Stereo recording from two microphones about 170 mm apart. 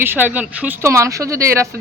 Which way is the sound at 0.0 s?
10° right (ahead or behind).